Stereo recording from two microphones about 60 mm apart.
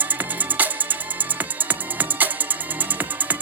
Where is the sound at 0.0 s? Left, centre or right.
Right.